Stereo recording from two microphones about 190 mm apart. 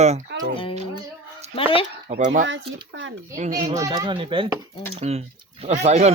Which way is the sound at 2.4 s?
75° right (ahead or behind).